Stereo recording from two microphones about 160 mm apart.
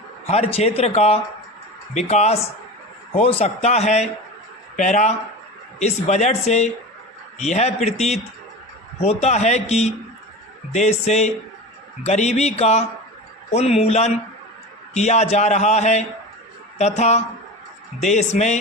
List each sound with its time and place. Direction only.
0.3 s a man's voice: 40° left (ahead or behind)